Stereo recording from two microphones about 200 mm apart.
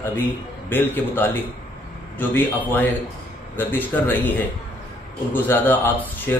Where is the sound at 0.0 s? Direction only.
10° left (ahead or behind).